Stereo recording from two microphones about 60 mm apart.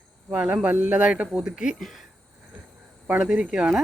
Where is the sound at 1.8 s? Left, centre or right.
Centre.